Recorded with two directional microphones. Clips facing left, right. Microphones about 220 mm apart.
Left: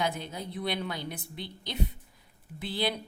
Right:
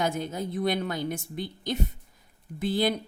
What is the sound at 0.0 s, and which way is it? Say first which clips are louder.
A woman's voice: right 4 dB; 45° right (ahead or behind).